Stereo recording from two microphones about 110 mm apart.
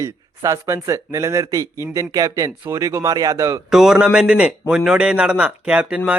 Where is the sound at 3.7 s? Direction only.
5° right (ahead or behind).